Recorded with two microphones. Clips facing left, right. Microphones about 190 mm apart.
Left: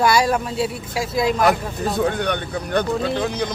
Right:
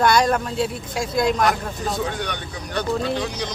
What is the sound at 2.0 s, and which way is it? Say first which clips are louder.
Speech: left 6 dB; 55° left (ahead or behind).